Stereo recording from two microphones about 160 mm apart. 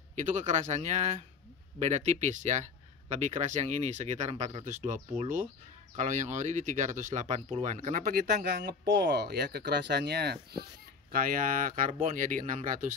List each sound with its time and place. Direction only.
0.1 s speech: 50° right (ahead or behind); by 10.6 s 85° right
11.1 s speech: 65° right (ahead or behind)